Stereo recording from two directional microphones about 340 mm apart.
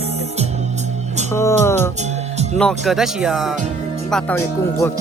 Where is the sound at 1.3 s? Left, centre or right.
Centre.